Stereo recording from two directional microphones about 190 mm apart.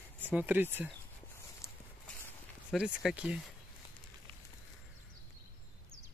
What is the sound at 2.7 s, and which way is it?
Speech, 5° right (ahead or behind).